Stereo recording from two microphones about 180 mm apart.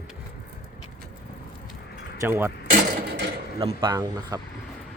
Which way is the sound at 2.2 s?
15° right (ahead or behind).